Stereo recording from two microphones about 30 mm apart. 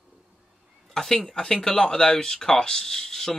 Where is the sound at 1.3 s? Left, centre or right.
Centre.